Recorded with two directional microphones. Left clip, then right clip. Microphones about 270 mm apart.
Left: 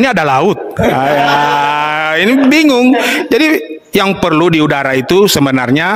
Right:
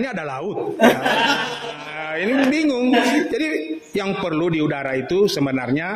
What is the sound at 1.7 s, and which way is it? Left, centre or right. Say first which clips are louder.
A man's voice: left 15 dB; left.